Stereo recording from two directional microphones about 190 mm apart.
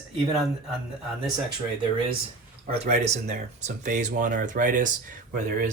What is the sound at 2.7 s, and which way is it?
Speech, 35° right (ahead or behind).